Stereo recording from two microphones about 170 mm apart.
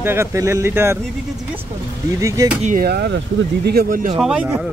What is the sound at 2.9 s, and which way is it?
Speech, 80° right.